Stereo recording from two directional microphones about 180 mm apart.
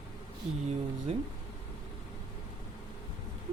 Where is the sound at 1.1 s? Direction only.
35° right (ahead or behind).